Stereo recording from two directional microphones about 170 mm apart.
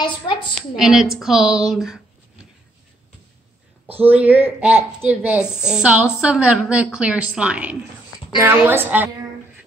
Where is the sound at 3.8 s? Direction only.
10° right (ahead or behind).